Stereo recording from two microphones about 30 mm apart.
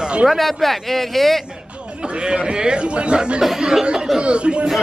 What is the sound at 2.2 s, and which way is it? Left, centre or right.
A man's voice, right.